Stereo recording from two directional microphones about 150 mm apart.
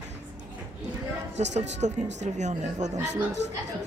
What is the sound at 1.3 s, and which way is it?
Speech, 50° right (ahead or behind).